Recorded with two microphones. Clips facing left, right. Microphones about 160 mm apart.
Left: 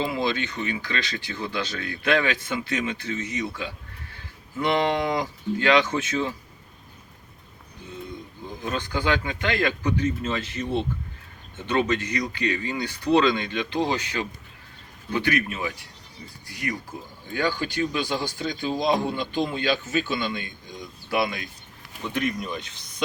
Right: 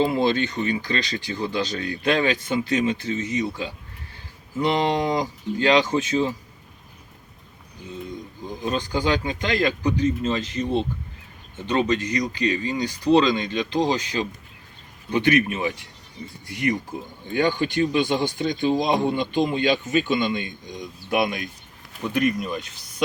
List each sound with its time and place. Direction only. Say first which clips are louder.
0.0 s speech: right 5 dB; 45° right (ahead or behind)
8.4 s speech: right 4 dB; 35° right (ahead or behind)
11.7 s speech: right 2 dB; 35° right (ahead or behind)
15.1 s speech: right 5 dB; 20° right (ahead or behind)
22.1 s speech: right 5 dB; 10° right (ahead or behind)